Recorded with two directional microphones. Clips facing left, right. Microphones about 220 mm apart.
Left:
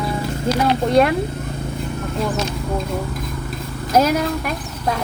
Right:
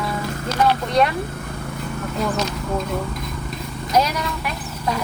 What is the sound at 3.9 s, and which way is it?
Speech, 50° left (ahead or behind).